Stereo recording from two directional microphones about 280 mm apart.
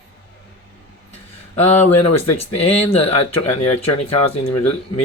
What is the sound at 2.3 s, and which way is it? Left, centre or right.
Speech, left.